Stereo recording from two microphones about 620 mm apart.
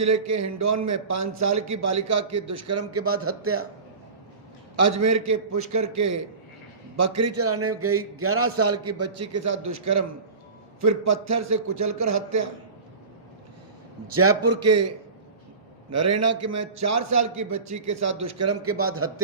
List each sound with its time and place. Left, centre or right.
0.0 s a man's voice: right
4.8 s a man's voice: right
10.8 s a man's voice: right
14.2 s a man's voice: right